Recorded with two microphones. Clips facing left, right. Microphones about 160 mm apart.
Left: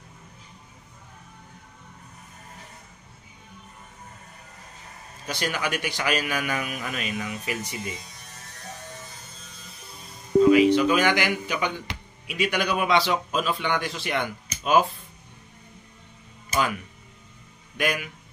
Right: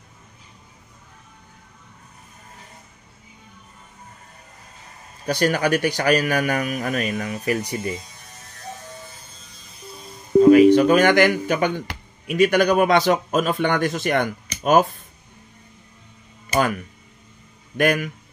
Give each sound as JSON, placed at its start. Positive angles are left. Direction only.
{"t": 5.2, "sound": "speech", "side_deg": -40}
{"t": 10.4, "sound": "speech", "side_deg": -45}
{"t": 16.5, "sound": "speech", "side_deg": -50}